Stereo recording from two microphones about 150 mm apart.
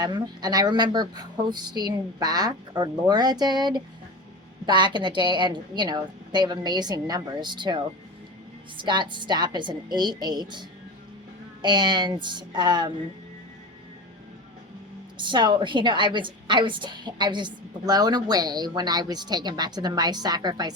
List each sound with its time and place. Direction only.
0.0 s a woman's voice: 25° right (ahead or behind)
8.8 s a woman's voice: 30° right (ahead or behind)
15.2 s a woman's voice: 30° right (ahead or behind)